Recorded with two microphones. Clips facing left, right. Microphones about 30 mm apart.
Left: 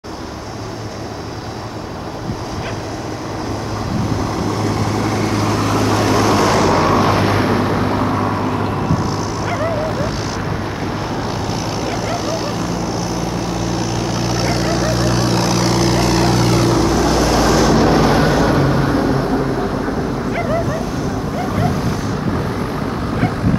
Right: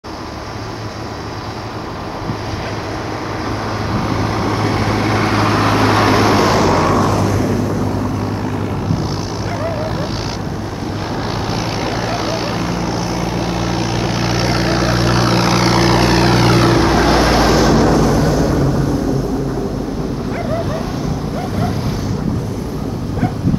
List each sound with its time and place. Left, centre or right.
4.2 s vehicle: right
6.6 s vehicle: centre
7.0 s vehicle: left
11.5 s vehicle: right
18.0 s a sound: left